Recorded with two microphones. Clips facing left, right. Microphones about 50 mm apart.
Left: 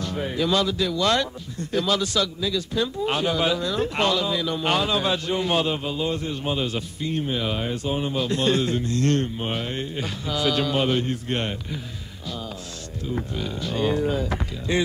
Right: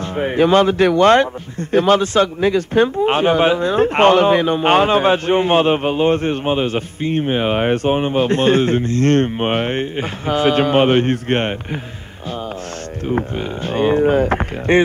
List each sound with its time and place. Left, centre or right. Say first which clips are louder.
0.0 s speech: right 9 dB; right
13.0 s speech: right 8 dB; right